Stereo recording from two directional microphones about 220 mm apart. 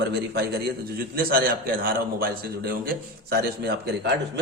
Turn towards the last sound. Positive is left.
turn(degrees=-45)  # may be behind; listen again after turning